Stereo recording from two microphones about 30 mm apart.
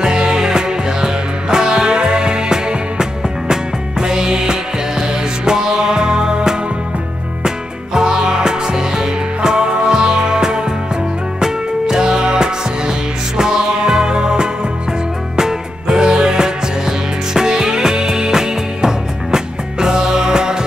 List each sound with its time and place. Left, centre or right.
0.0 s music: right